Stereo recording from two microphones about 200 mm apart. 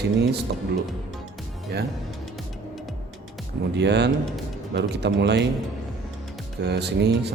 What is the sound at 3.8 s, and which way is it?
Speech, 60° right (ahead or behind).